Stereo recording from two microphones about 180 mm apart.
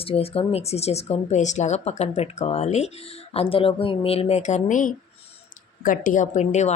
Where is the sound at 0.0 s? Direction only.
35° left (ahead or behind).